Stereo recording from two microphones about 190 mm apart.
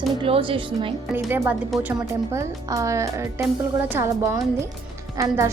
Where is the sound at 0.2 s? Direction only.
25° right (ahead or behind).